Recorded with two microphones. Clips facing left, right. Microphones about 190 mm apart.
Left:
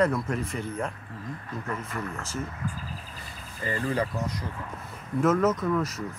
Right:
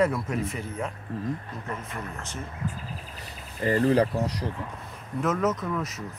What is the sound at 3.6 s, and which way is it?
Speech, 35° right (ahead or behind).